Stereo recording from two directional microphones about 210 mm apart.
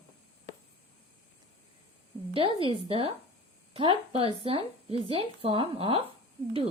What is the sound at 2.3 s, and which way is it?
Speech, 25° right (ahead or behind).